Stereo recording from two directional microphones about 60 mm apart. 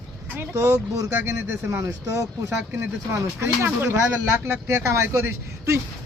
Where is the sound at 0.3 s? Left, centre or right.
Right.